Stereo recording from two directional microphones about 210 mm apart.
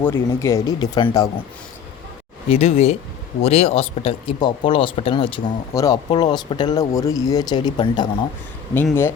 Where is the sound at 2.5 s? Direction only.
30° left (ahead or behind).